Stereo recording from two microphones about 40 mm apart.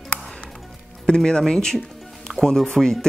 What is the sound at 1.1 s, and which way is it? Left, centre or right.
Speech, centre.